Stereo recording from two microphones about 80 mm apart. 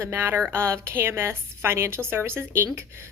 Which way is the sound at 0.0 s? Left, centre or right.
Right.